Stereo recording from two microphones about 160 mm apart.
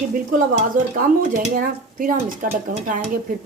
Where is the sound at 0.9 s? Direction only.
60° right (ahead or behind).